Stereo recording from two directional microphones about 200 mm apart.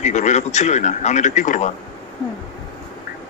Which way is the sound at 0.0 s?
35° left (ahead or behind).